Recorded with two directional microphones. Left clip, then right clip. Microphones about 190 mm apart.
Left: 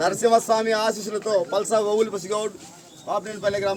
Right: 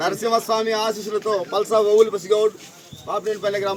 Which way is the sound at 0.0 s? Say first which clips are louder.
Left 2 dB; 35° left (ahead or behind).